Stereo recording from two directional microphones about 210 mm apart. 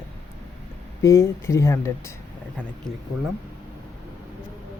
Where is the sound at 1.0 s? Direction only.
15° left (ahead or behind).